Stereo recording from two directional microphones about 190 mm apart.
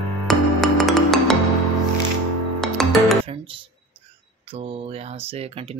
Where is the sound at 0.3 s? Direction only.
Centre (ahead or behind).